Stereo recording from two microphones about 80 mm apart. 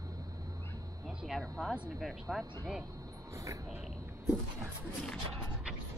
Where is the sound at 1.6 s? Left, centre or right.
Centre.